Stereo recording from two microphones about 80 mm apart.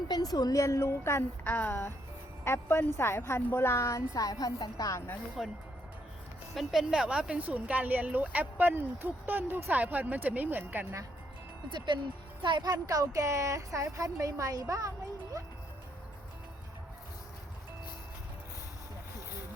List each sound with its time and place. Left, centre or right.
0.1 s a woman's voice: left
5.4 s speech: centre; by 10.8 s right
12.4 s speech: right